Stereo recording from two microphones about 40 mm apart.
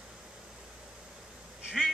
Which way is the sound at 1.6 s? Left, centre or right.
Centre.